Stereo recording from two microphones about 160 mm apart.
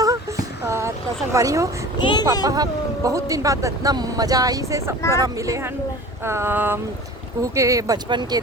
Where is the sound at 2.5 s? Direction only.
20° right (ahead or behind).